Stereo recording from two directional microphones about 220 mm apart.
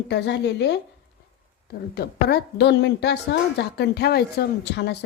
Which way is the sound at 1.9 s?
50° left (ahead or behind).